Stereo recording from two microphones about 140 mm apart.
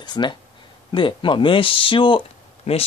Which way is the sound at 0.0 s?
30° left (ahead or behind).